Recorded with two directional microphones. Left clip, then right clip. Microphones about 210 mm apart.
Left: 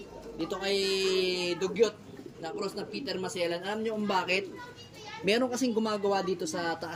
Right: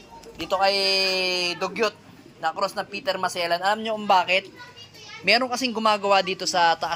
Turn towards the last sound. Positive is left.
turn(degrees=0)  # may be behind; listen again after turning